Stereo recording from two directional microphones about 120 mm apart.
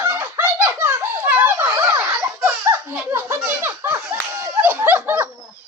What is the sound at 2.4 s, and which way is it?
Laughter, 20° right (ahead or behind).